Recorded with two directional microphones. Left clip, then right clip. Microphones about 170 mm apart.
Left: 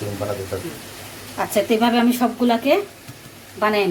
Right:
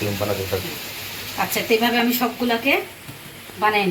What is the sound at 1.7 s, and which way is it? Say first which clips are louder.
Speech: right 2 dB; 60° left (ahead or behind).